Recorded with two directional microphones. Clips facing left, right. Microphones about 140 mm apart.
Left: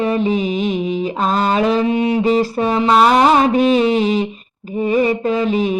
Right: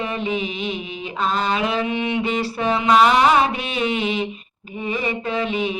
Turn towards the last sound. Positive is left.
turn(degrees=40)  # may be behind; listen again after turning